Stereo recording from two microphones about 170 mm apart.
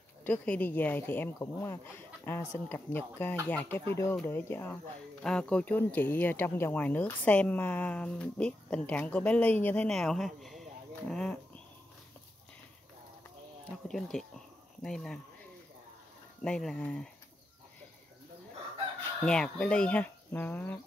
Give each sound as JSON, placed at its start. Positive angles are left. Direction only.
{"t": 0.2, "sound": "speech", "side_deg": 10}
{"t": 13.8, "sound": "a sound", "side_deg": 5}
{"t": 16.4, "sound": "speech", "side_deg": 5}
{"t": 19.2, "sound": "speech", "side_deg": 5}